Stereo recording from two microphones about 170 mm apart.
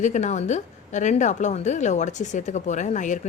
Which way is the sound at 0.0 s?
45° left (ahead or behind).